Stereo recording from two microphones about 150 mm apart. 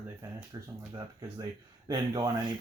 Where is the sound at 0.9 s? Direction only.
25° right (ahead or behind).